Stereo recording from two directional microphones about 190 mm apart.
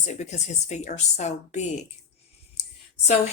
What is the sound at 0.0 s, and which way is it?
A woman's voice, 35° left (ahead or behind).